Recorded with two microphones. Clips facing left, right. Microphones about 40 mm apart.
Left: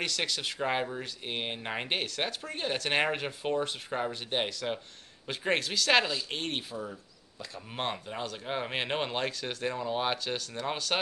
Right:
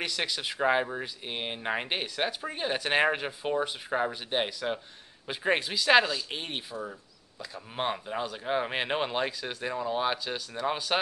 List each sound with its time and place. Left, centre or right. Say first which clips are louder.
0.0 s speech: right 1 dB; centre
1.2 s speech: even; centre
6.0 s speech: right 1 dB; centre
6.4 s speech: left 1 dB; centre
10.1 s speech: even; centre